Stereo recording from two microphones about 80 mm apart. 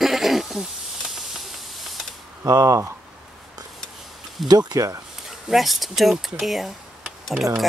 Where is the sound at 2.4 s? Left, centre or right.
Right.